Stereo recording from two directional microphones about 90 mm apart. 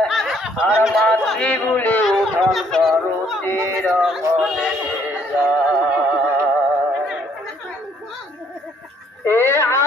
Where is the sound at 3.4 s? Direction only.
25° left (ahead or behind).